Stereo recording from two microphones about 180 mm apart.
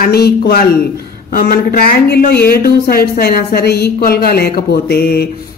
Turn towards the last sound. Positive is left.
turn(degrees=60)  # may be behind; listen again after turning